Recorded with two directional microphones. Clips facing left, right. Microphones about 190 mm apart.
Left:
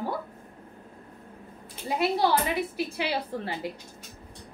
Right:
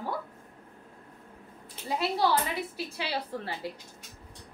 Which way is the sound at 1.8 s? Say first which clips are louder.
Left 3 dB; 15° left (ahead or behind).